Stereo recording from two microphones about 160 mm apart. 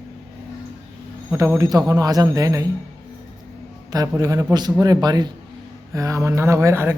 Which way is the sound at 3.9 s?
20° right (ahead or behind).